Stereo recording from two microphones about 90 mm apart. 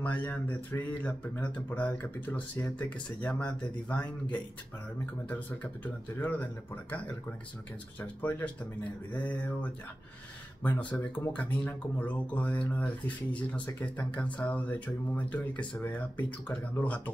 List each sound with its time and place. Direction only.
0.0 s speech: 15° left (ahead or behind)
6.1 s speech: 20° left (ahead or behind)
10.9 s speech: 15° left (ahead or behind)